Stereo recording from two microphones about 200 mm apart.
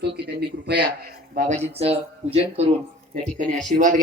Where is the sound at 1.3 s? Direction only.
40° right (ahead or behind).